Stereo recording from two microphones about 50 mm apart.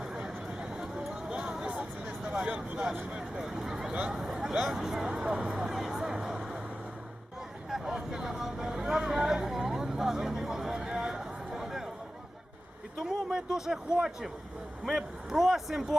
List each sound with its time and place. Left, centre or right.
0.0 s a sound: centre
1.5 s vehicle: right
2.2 s speech: right
7.7 s vehicle: centre
9.0 s a sound: centre
13.0 s speech: centre